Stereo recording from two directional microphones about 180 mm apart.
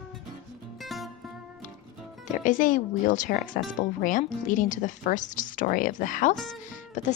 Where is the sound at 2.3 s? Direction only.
45° left (ahead or behind).